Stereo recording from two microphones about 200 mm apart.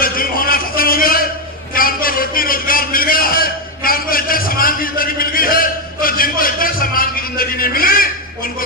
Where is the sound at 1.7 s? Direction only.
45° left (ahead or behind).